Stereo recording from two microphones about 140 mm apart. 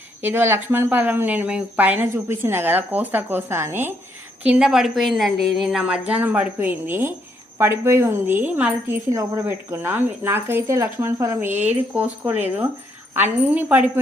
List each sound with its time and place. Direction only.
0.2 s speech: 15° right (ahead or behind)
11.5 s speech: 55° right (ahead or behind)
11.9 s speech: 10° right (ahead or behind)